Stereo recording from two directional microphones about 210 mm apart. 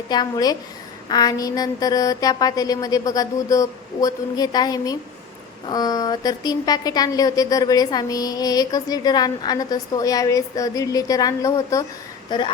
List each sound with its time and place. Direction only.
0.1 s a woman's voice: 20° left (ahead or behind)